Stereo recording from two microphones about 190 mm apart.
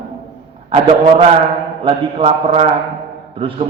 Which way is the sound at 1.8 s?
30° right (ahead or behind).